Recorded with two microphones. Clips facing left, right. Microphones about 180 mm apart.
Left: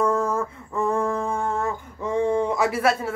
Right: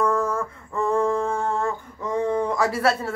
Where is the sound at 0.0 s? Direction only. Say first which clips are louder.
Even; 25° left (ahead or behind).